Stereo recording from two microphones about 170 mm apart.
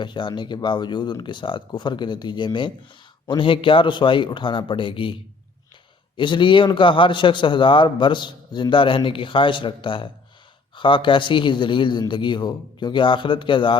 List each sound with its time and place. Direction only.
0.0 s a man's voice: 30° left (ahead or behind)
6.1 s a man's voice: 30° left (ahead or behind)